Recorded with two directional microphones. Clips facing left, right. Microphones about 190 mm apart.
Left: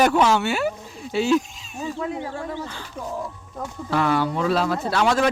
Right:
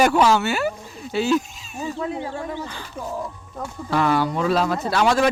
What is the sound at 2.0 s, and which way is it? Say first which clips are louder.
Speech: right 1 dB; 25° right (ahead or behind).